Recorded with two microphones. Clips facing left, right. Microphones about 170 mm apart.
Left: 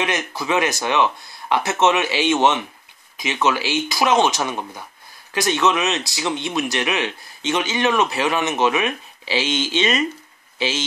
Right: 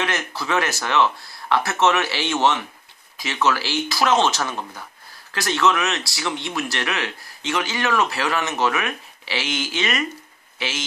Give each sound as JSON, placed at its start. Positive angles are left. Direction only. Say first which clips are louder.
{"t": 0.0, "sound": "speech", "louder": "left 2 dB", "side_deg": 15}